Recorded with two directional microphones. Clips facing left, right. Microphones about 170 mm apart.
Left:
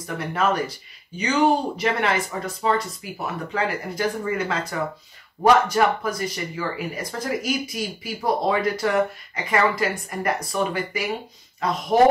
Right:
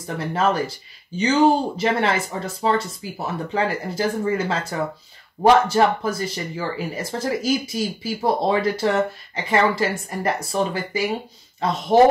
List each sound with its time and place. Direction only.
0.0 s speech: 30° right (ahead or behind)